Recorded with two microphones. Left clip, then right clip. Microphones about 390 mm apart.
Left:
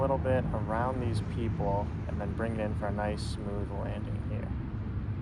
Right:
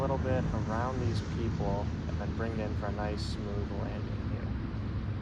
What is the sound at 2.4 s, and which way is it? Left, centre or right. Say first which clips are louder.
Speech: left 3 dB; centre.